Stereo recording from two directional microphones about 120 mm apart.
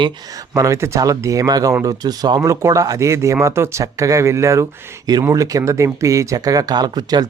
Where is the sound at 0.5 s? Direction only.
25° right (ahead or behind).